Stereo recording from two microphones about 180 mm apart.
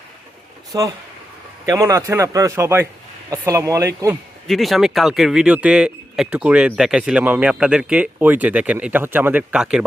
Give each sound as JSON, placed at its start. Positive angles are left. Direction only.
{"t": 0.7, "sound": "speech", "side_deg": -20}
{"t": 4.4, "sound": "speech", "side_deg": 0}